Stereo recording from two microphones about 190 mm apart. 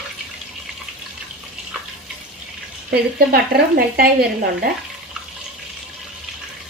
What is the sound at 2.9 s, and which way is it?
Speech, 55° right (ahead or behind).